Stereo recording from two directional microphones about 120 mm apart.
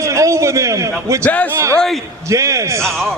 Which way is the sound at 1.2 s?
15° left (ahead or behind).